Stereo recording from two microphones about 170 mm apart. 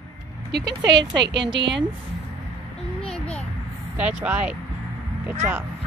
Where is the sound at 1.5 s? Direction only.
90° right.